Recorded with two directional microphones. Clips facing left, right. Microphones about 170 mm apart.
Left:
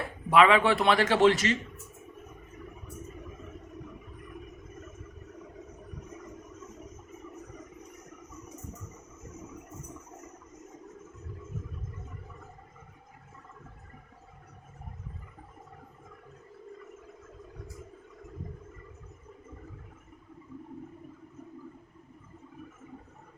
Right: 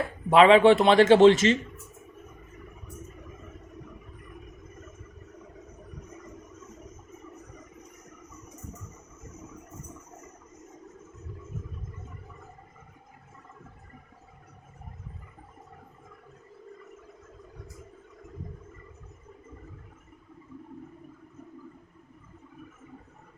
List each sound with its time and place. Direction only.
0.3 s a man's voice: 25° right (ahead or behind)